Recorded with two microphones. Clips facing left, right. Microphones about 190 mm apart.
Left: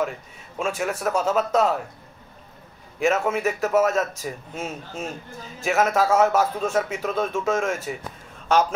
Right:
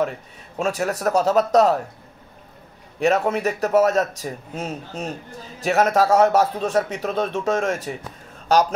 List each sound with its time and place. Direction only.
0.6 s a man's voice: 40° right (ahead or behind)
3.0 s a man's voice: 35° right (ahead or behind)